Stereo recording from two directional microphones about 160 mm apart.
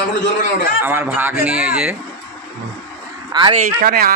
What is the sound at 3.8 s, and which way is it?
Speech, 70° right (ahead or behind).